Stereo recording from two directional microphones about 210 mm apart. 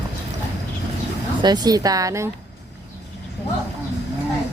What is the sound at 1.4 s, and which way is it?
Speech, 20° right (ahead or behind).